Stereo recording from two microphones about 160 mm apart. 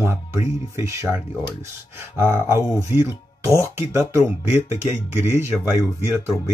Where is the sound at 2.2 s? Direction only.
15° right (ahead or behind).